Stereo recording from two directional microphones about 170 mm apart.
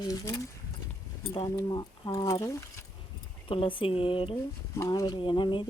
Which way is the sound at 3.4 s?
30° left (ahead or behind).